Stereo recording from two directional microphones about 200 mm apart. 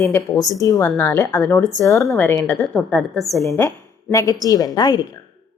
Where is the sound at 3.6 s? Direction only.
15° left (ahead or behind).